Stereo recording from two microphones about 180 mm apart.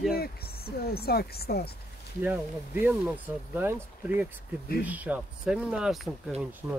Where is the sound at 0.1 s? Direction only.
60° left (ahead or behind).